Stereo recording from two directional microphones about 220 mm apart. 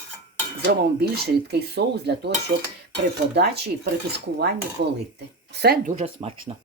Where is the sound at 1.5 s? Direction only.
50° right (ahead or behind).